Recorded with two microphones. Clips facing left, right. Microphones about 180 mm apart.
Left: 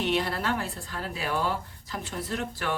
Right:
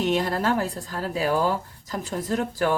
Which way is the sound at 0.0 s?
45° right (ahead or behind).